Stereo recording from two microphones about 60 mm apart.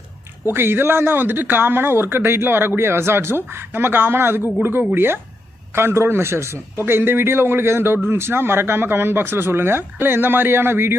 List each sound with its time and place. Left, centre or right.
0.5 s a man's voice: right